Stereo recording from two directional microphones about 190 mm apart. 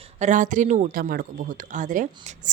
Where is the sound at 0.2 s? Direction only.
40° right (ahead or behind).